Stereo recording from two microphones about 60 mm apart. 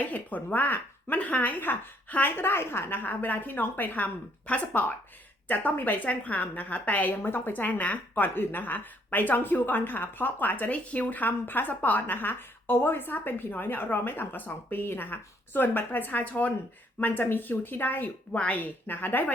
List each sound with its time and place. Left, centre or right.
0.0 s a woman's voice: left
18.3 s a woman's voice: left